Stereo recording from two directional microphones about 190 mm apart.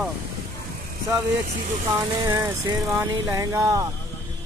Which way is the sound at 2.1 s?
15° right (ahead or behind).